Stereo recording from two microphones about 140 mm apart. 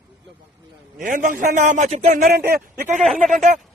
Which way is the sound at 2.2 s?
90° right.